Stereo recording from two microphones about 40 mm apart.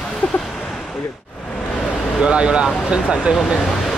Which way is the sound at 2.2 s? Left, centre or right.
Right.